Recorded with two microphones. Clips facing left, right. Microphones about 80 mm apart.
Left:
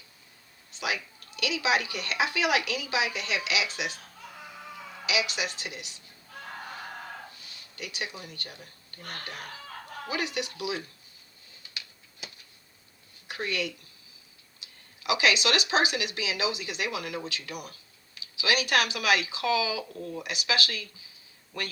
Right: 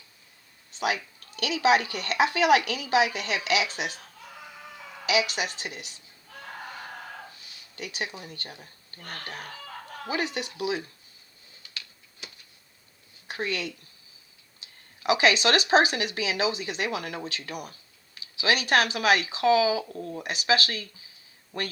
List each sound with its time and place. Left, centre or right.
0.7 s a sound: right
1.4 s speech: right
5.0 s speech: right
7.8 s speech: right
10.1 s speech: right
13.2 s a woman's voice: right